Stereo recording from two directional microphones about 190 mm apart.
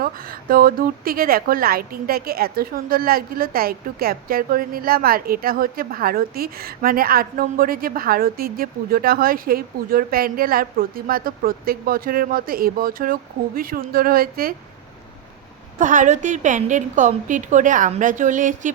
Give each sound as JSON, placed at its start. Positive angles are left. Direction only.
{"t": 0.0, "sound": "a woman's voice", "side_deg": -50}
{"t": 15.8, "sound": "a woman's voice", "side_deg": -40}